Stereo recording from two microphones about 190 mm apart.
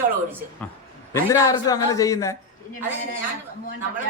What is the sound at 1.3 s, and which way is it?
A man's voice, 15° left (ahead or behind).